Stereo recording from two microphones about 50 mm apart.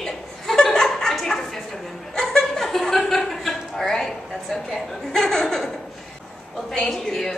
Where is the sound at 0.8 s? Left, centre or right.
Centre.